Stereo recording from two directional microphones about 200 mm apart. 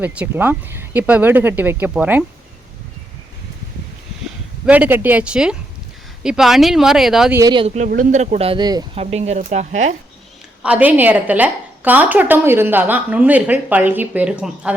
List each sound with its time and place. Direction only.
0.0 s a woman's voice: 5° right (ahead or behind)
4.6 s a woman's voice: 5° right (ahead or behind)
7.3 s speech: 20° right (ahead or behind)
10.6 s a woman's voice: 5° right (ahead or behind)